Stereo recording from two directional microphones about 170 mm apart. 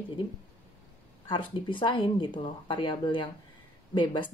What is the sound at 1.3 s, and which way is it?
A woman's voice, 30° left (ahead or behind).